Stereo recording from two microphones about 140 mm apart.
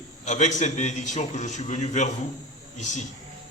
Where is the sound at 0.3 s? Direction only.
60° left (ahead or behind).